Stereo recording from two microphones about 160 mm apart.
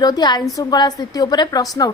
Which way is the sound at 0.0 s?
25° left (ahead or behind).